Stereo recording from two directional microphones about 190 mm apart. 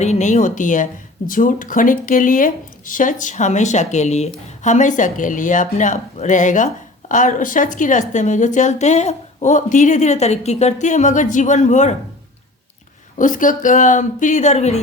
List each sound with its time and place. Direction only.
0.0 s a woman's voice: 40° left (ahead or behind)
13.1 s a woman's voice: 45° left (ahead or behind)